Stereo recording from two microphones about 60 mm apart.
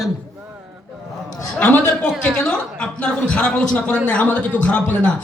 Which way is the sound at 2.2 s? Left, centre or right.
Centre.